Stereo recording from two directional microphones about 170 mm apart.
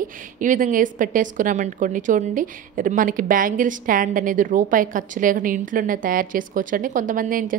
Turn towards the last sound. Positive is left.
turn(degrees=-55)  # may be behind; listen again after turning